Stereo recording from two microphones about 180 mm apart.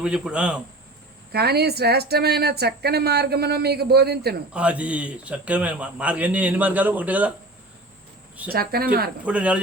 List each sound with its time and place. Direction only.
0.0 s a man's voice: 5° right (ahead or behind)
1.3 s speech: 65° right (ahead or behind)
4.5 s a man's voice: 5° right (ahead or behind)
8.5 s speech: 55° right (ahead or behind)
9.2 s a man's voice: 5° right (ahead or behind)